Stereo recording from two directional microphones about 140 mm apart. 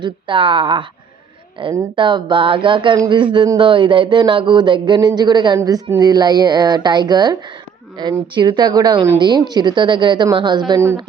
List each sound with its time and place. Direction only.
0.0 s a woman's voice: 35° right (ahead or behind)